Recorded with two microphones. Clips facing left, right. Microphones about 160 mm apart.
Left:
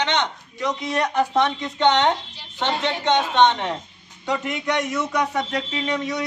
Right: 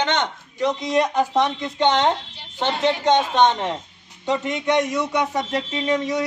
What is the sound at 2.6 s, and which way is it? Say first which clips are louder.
A man's voice: right 3 dB; 40° right (ahead or behind).